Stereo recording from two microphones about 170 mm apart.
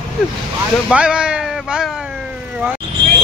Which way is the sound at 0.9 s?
5° right (ahead or behind).